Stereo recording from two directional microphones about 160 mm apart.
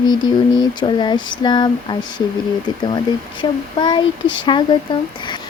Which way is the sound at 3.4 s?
30° left (ahead or behind).